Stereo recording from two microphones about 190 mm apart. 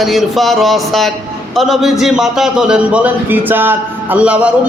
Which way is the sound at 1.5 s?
Centre (ahead or behind).